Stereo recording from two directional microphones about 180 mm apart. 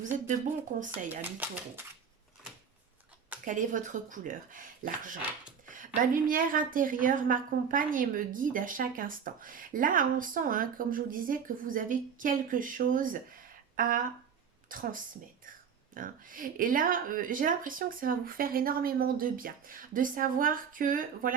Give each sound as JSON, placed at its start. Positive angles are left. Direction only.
{"t": 0.0, "sound": "speech", "side_deg": -45}
{"t": 0.7, "sound": "speech", "side_deg": -60}
{"t": 1.4, "sound": "speech", "side_deg": -10}
{"t": 3.4, "sound": "a woman's voice", "side_deg": -45}